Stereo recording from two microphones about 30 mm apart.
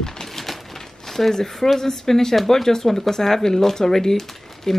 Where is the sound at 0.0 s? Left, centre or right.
Centre.